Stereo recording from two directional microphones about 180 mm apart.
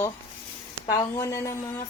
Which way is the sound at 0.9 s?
15° left (ahead or behind).